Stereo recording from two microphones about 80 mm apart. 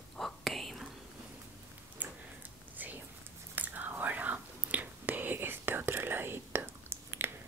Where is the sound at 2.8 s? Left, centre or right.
Right.